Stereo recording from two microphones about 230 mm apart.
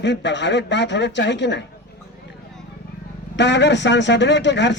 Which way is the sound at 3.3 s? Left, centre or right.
Left.